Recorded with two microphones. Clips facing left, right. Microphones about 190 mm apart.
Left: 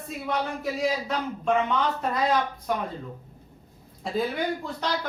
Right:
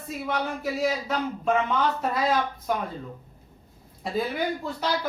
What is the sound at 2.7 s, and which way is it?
Speech, centre (ahead or behind).